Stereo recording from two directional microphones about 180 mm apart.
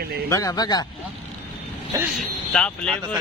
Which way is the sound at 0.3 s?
20° left (ahead or behind).